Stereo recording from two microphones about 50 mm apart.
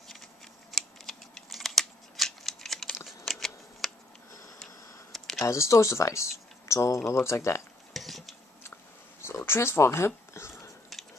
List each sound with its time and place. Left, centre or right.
0.7 s scissors: centre
3.1 s shuffling cards: centre
5.1 s a sound: centre
5.4 s speech: left
7.9 s dishes: centre
9.2 s a sound: left